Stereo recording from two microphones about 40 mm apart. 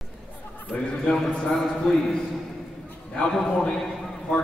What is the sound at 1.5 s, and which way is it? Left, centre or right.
Speech, centre.